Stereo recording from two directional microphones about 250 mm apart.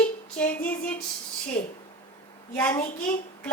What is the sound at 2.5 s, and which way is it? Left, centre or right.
Speech, centre.